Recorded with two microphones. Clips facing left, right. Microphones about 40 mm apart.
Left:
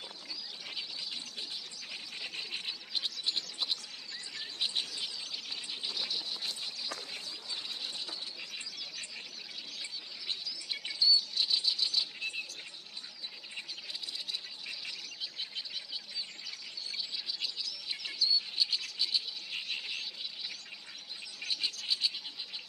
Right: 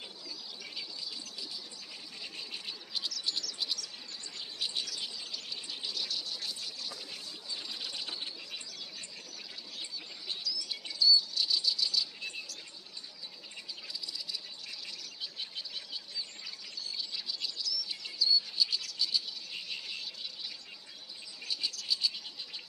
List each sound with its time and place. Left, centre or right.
0.9 s bird: left
2.2 s bird: left
9.8 s bird: left
13.6 s a sound: left
16.9 s bird: centre
17.6 s bird: left